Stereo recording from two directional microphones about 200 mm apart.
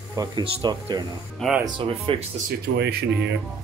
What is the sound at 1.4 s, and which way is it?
Speech, 5° right (ahead or behind).